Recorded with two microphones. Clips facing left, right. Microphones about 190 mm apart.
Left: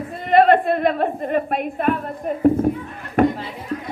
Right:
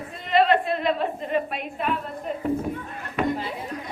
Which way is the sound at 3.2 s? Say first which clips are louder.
Left 8 dB; 50° left (ahead or behind).